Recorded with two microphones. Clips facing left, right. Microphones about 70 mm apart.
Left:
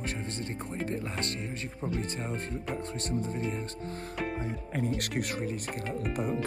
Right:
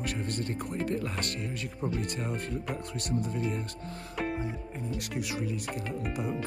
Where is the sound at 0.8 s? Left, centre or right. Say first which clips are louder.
Right 1 dB; left.